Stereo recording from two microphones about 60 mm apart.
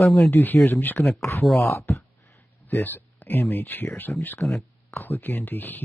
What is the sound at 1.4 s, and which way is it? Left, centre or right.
Speech, centre.